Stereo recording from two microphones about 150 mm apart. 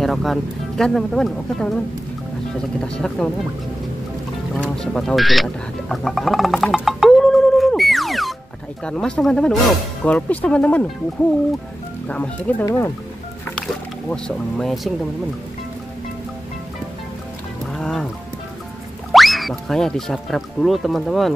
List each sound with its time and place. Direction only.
0.0 s speech: centre (ahead or behind)
2.8 s speech: 5° left (ahead or behind)
4.6 s a sound: 5° left (ahead or behind)
8.8 s speech: 5° left (ahead or behind)
12.1 s speech: 10° left (ahead or behind)
13.6 s a sound: 5° left (ahead or behind)
17.7 s music: 5° left (ahead or behind)
19.1 s speech: centre (ahead or behind)